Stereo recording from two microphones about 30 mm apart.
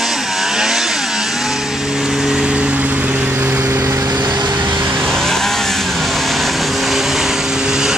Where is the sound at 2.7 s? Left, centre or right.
Right.